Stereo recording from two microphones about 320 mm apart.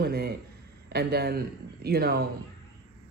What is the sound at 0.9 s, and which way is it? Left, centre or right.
Speech, right.